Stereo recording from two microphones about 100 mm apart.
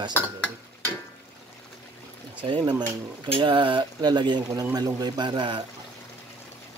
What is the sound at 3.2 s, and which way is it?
Speech, 60° right (ahead or behind).